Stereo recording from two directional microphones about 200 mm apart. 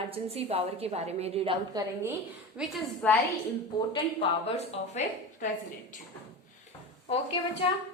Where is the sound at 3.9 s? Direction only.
25° left (ahead or behind).